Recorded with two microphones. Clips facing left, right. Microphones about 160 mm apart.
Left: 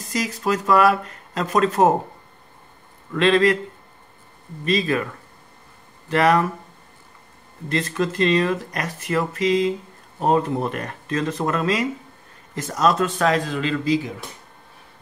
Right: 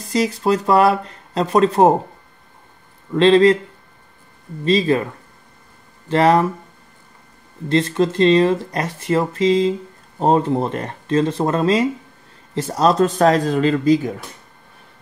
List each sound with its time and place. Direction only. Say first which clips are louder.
0.0 s speech: right 6 dB; 30° right (ahead or behind)
3.1 s speech: right 5 dB; 30° right (ahead or behind)
4.6 s speech: right 5 dB; 30° right (ahead or behind)
7.6 s speech: right 6 dB; 25° right (ahead or behind); by 14.1 s 45° right (ahead or behind)